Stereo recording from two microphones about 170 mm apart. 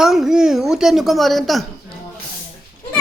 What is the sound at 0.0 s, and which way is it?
Speech, centre (ahead or behind).